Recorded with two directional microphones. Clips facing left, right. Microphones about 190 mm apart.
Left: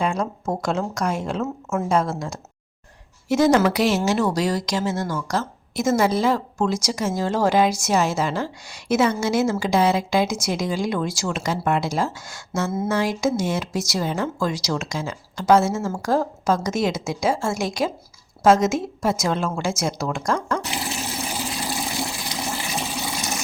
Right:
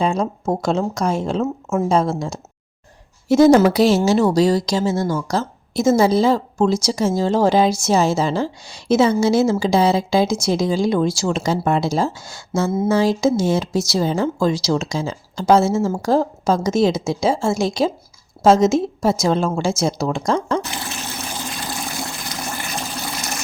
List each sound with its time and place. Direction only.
0.0 s a woman's voice: 25° right (ahead or behind)
20.7 s water: 15° left (ahead or behind)
23.0 s water: 20° left (ahead or behind)